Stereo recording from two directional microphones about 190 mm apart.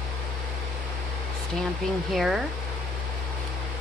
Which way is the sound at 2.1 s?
Centre (ahead or behind).